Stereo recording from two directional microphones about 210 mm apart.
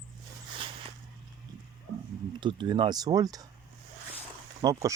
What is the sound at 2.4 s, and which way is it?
Speech, 20° right (ahead or behind).